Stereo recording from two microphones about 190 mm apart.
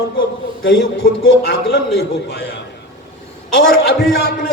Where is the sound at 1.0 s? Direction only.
55° left (ahead or behind).